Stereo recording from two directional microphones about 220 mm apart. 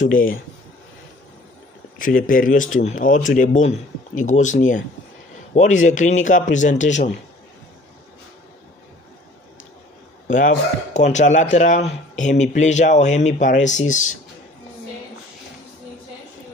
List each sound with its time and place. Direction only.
0.0 s speech: 40° left (ahead or behind)
2.0 s speech: 40° left (ahead or behind)
10.2 s a man's voice: 35° left (ahead or behind)